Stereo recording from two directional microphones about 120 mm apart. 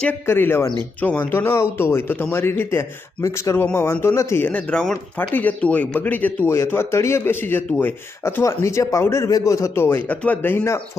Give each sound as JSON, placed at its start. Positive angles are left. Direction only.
{"t": 0.0, "sound": "a man's voice", "side_deg": 15}